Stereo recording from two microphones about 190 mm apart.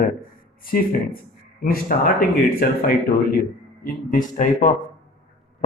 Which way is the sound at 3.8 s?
45° left (ahead or behind).